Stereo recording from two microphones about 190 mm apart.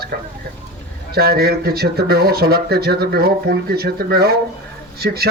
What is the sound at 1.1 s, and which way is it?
A man's voice, 55° right (ahead or behind).